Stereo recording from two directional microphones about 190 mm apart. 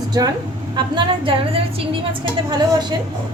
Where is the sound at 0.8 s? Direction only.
25° right (ahead or behind).